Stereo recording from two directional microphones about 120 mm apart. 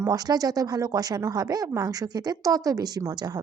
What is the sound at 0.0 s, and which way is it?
A woman's voice, 30° right (ahead or behind).